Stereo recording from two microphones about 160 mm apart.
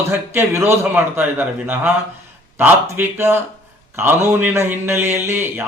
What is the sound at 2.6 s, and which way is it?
A man's voice, 10° right (ahead or behind).